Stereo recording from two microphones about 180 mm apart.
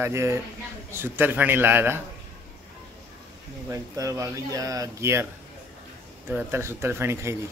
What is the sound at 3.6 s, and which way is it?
Speech, 20° right (ahead or behind).